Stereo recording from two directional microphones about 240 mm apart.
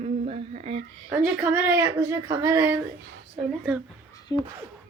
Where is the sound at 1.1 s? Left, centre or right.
Centre.